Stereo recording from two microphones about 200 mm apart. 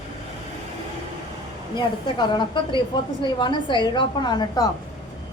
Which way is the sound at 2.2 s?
20° left (ahead or behind).